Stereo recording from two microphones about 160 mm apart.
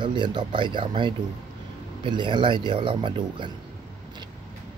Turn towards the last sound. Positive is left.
turn(degrees=-30)  # may be behind; listen again after turning